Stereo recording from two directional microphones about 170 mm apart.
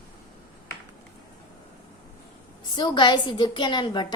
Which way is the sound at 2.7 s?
25° left (ahead or behind).